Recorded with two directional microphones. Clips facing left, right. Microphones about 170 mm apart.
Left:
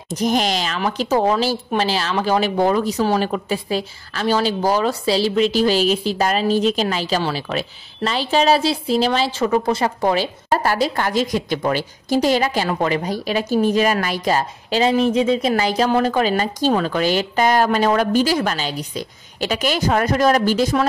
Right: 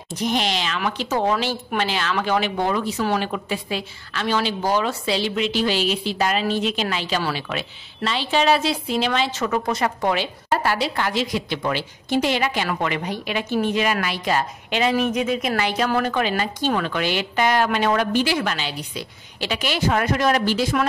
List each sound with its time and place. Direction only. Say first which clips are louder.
0.1 s speech: left 4 dB; 45° left (ahead or behind)